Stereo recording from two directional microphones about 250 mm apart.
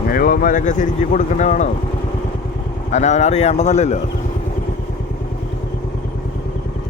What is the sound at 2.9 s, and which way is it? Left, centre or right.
Speech, left.